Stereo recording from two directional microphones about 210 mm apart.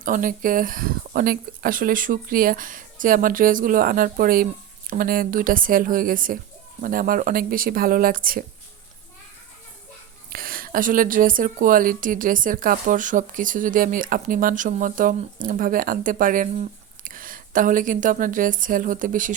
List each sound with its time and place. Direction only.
0.0 s speech: 40° right (ahead or behind)
10.2 s speech: 45° right (ahead or behind)